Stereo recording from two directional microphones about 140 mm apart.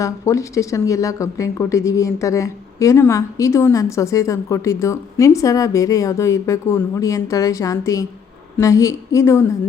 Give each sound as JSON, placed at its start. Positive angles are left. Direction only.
{"t": 0.0, "sound": "speech", "side_deg": 20}